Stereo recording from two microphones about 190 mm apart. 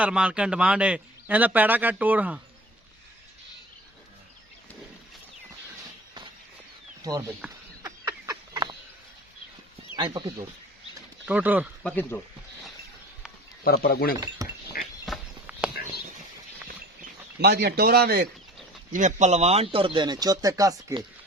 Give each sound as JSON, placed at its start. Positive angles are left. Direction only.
{"t": 0.0, "sound": "a man's voice", "side_deg": -5}
{"t": 7.0, "sound": "a sound", "side_deg": -15}
{"t": 9.9, "sound": "speech", "side_deg": -25}
{"t": 11.3, "sound": "a man's voice", "side_deg": -10}
{"t": 11.8, "sound": "speech", "side_deg": 5}
{"t": 13.7, "sound": "speech", "side_deg": 50}
{"t": 14.4, "sound": "a sound", "side_deg": -20}
{"t": 15.0, "sound": "a sound", "side_deg": 0}
{"t": 17.4, "sound": "speech", "side_deg": -60}
{"t": 18.9, "sound": "speech", "side_deg": -40}